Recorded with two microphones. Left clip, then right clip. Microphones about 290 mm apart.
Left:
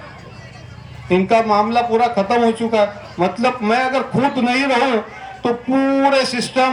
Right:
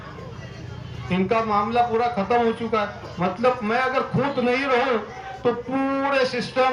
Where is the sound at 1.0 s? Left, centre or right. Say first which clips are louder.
Left 8 dB; left.